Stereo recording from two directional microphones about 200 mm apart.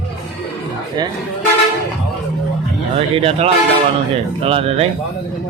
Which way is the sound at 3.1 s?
30° right (ahead or behind).